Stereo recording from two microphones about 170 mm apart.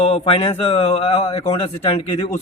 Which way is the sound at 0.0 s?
35° left (ahead or behind).